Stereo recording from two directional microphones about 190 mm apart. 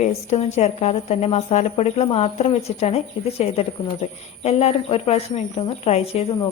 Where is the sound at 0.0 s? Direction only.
35° left (ahead or behind).